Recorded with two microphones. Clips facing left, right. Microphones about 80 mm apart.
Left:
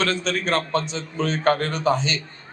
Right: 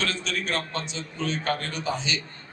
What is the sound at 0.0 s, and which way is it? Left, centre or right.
A man's voice, left.